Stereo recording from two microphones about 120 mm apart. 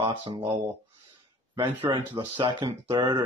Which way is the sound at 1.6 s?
40° right (ahead or behind).